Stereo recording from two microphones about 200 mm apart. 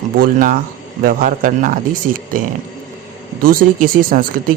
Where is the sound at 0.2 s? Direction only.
45° right (ahead or behind).